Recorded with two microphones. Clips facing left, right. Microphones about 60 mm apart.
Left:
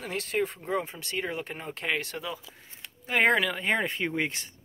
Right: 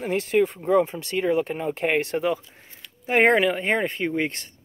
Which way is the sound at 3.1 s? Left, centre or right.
Right.